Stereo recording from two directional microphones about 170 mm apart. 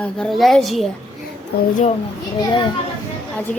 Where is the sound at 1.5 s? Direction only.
65° left (ahead or behind).